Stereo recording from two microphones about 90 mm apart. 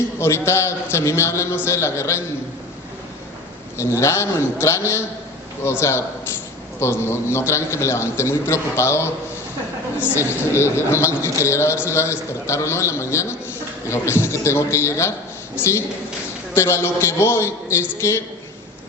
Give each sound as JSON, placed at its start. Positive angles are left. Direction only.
{"t": 0.2, "sound": "a man's voice", "side_deg": 30}
{"t": 3.8, "sound": "a man's voice", "side_deg": 30}